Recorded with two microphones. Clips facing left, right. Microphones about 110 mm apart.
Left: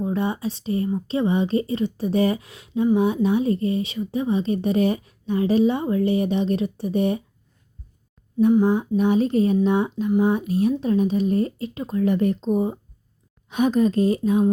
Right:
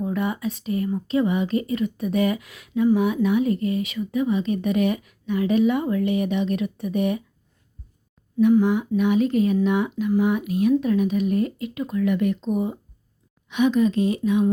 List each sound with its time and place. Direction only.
0.0 s speech: 30° left (ahead or behind)
8.4 s speech: 30° left (ahead or behind)